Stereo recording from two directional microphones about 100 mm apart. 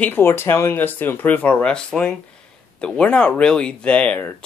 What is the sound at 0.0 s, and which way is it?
A man's voice, 20° left (ahead or behind).